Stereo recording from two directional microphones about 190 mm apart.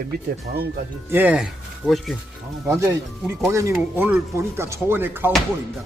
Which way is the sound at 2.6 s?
15° right (ahead or behind).